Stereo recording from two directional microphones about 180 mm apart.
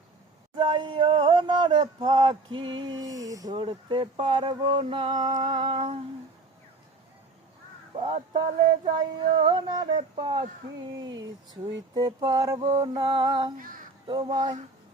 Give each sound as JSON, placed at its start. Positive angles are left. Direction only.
{"t": 0.5, "sound": "speech", "side_deg": -25}
{"t": 5.3, "sound": "humming", "side_deg": -30}
{"t": 7.9, "sound": "speech", "side_deg": -35}
{"t": 13.6, "sound": "speech", "side_deg": -50}
{"t": 14.1, "sound": "speech", "side_deg": -25}